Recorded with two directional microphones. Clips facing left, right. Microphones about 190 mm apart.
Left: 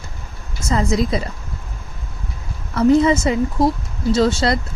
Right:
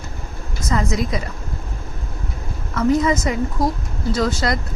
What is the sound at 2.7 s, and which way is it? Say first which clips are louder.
Speech: left 4 dB; 30° left (ahead or behind).